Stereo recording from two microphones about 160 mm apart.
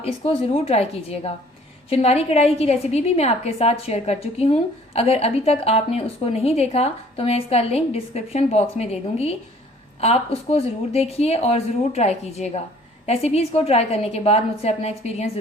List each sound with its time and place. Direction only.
0.0 s a woman's voice: 35° left (ahead or behind)